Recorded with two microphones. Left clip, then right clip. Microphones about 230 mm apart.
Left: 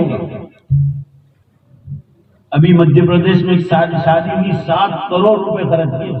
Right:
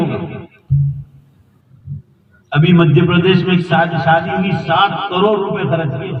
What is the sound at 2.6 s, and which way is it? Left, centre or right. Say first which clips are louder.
A man's voice: left 2 dB; right.